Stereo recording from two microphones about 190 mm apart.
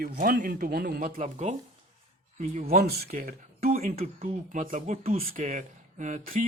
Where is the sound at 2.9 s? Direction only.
50° right (ahead or behind).